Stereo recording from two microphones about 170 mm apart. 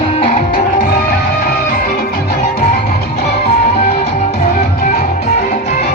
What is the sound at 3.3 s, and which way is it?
Music, 40° left (ahead or behind).